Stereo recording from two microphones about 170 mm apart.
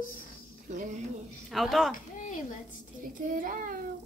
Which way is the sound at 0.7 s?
45° right (ahead or behind).